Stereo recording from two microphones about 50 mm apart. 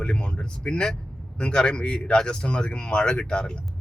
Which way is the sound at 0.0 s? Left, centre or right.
Centre.